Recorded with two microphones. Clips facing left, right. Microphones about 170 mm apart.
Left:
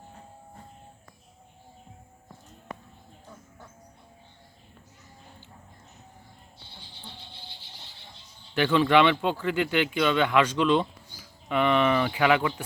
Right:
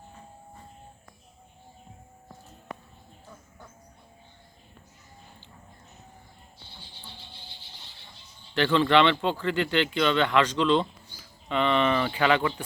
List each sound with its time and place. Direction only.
8.5 s speech: 10° left (ahead or behind)